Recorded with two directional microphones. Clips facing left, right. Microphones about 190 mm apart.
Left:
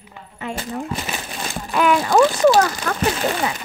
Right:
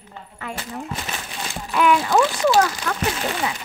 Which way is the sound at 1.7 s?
45° left (ahead or behind).